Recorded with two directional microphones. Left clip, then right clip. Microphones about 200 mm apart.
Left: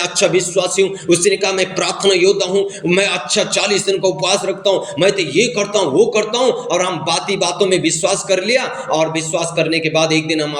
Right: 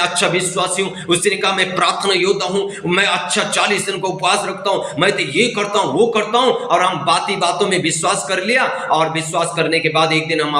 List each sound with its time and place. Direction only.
0.0 s a man's voice: 25° left (ahead or behind)